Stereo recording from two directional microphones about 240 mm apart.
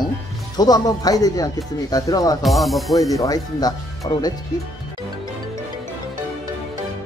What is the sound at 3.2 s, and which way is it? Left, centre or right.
Speech, centre.